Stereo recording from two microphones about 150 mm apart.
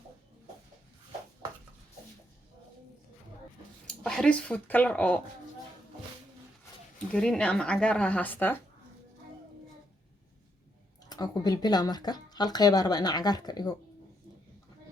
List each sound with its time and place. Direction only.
3.8 s speech: 5° left (ahead or behind)
7.1 s speech: 5° left (ahead or behind)
11.1 s speech: 25° left (ahead or behind)